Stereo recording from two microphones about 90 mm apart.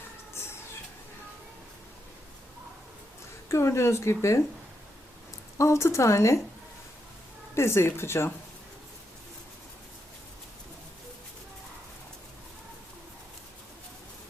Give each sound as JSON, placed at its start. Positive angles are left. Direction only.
{"t": 3.5, "sound": "speech", "side_deg": 30}
{"t": 5.5, "sound": "speech", "side_deg": 35}
{"t": 7.5, "sound": "speech", "side_deg": 30}